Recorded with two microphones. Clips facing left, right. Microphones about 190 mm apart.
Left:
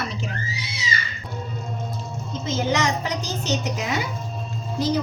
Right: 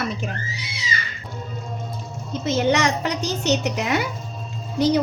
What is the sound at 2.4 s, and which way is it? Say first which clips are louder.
A woman's voice: right 4 dB; 65° right (ahead or behind).